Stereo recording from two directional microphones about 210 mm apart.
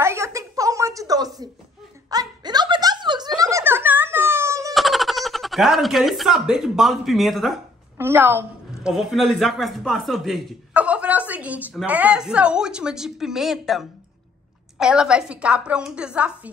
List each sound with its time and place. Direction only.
0.0 s a sound: 15° right (ahead or behind)
4.7 s speech: centre (ahead or behind)
8.0 s a woman's voice: 10° right (ahead or behind)
8.9 s speech: centre (ahead or behind)